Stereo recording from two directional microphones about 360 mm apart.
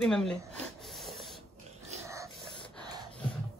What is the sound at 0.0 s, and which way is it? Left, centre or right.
Speech, centre.